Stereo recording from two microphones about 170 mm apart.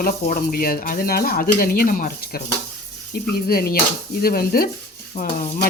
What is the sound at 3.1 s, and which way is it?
Speech, 65° left (ahead or behind).